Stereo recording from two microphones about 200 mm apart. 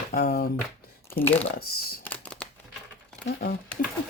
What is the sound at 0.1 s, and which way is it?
Speech, 50° left (ahead or behind).